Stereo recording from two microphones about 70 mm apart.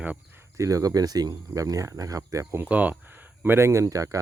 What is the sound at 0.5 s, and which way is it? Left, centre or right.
Speech, right.